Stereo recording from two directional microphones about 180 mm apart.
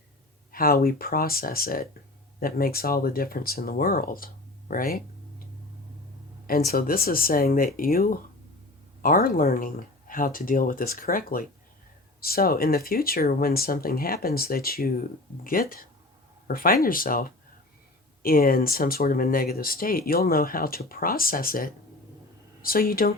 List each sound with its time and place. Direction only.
0.5 s speech: 55° left (ahead or behind)
6.7 s speech: 55° left (ahead or behind)